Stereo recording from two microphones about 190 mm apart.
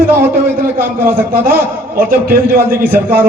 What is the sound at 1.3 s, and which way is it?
A man's voice, 50° right (ahead or behind).